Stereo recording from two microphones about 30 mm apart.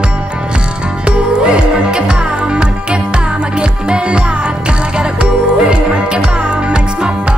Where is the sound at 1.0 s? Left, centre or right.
Right.